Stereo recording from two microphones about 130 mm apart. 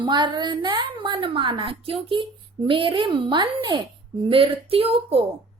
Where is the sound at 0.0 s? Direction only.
35° right (ahead or behind).